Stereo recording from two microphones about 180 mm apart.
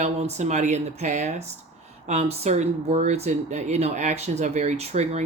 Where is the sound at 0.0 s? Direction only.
40° right (ahead or behind).